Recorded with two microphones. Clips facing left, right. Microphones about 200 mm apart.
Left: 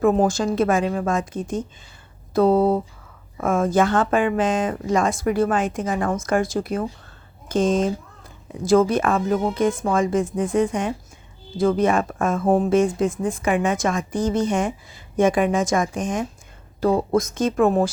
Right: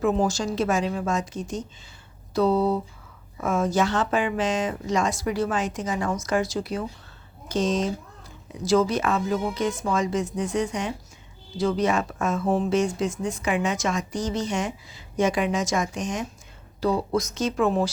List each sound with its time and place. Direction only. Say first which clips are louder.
0.0 s speech: left 5 dB; 55° left (ahead or behind)